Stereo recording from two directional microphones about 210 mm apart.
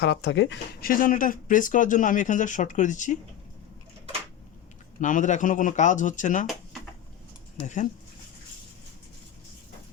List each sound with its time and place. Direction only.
0.0 s speech: 55° left (ahead or behind); by 3.2 s 35° left (ahead or behind)
4.9 s speech: 35° left (ahead or behind)
7.6 s speech: 35° left (ahead or behind)